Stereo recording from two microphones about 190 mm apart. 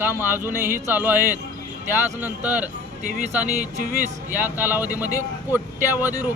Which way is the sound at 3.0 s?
45° right (ahead or behind).